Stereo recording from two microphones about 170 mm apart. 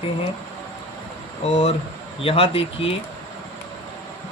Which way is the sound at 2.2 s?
35° left (ahead or behind).